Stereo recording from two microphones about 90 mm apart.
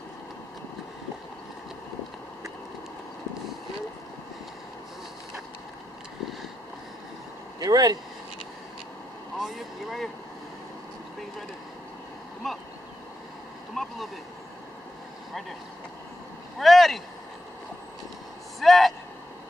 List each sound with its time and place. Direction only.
7.6 s speech: 45° right (ahead or behind)
9.4 s vehicle: centre (ahead or behind)
12.4 s a sound: centre (ahead or behind)
13.8 s vehicle: 5° left (ahead or behind)
16.5 s vehicle: centre (ahead or behind)
18.6 s vehicle: centre (ahead or behind)